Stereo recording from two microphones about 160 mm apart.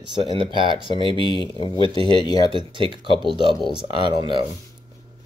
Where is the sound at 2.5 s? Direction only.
30° right (ahead or behind).